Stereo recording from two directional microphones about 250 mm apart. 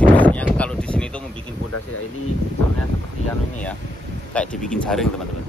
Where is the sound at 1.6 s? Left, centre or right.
Left.